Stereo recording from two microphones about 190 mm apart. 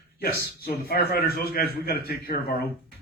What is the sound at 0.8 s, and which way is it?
Speech, 55° left (ahead or behind).